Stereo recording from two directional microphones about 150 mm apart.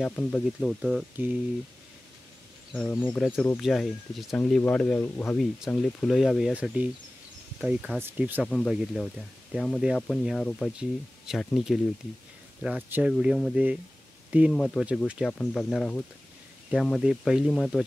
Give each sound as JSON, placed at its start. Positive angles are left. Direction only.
{"t": 0.0, "sound": "speech", "side_deg": 5}
{"t": 2.7, "sound": "speech", "side_deg": 10}
{"t": 8.5, "sound": "speech", "side_deg": 0}
{"t": 14.5, "sound": "speech", "side_deg": 5}
{"t": 15.0, "sound": "speech", "side_deg": -5}
{"t": 15.3, "sound": "speech", "side_deg": 5}